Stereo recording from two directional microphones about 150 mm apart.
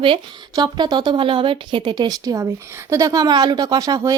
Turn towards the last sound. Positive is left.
turn(degrees=-25)  # may be behind; listen again after turning